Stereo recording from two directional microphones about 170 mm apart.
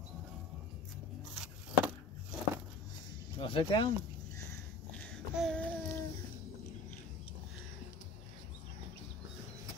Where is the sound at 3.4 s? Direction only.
30° left (ahead or behind).